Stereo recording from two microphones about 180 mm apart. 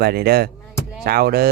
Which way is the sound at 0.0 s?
60° right (ahead or behind).